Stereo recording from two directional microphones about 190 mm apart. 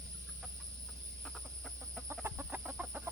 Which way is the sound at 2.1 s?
10° right (ahead or behind).